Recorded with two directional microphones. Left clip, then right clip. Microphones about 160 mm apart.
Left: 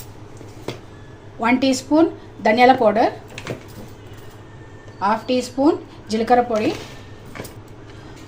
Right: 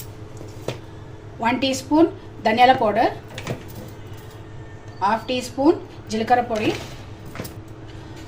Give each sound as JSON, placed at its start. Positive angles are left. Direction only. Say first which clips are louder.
{"t": 1.4, "sound": "a woman's voice", "louder": "left 3 dB", "side_deg": 45}
{"t": 4.9, "sound": "a woman's voice", "louder": "left 2 dB", "side_deg": 40}